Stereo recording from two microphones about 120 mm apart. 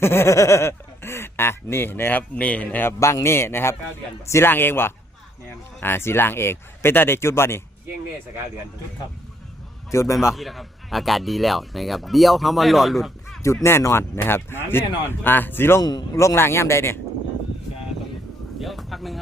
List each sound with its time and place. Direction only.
0.0 s speech: 20° left (ahead or behind)
9.9 s speech: 25° left (ahead or behind)
10.2 s speech: centre (ahead or behind)
13.4 s speech: 25° left (ahead or behind)
15.8 s speech: 35° left (ahead or behind)
18.6 s speech: centre (ahead or behind)